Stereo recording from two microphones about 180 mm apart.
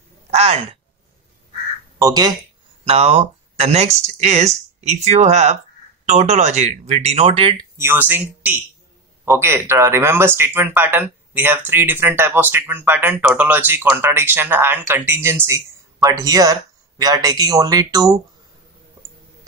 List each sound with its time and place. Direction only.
0.3 s speech: 35° right (ahead or behind)
2.0 s speech: 20° right (ahead or behind)
2.8 s speech: 35° right (ahead or behind)
7.7 s speech: 15° right (ahead or behind)